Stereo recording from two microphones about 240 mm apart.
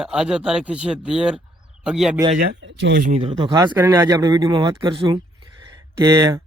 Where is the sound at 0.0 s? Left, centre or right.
Centre.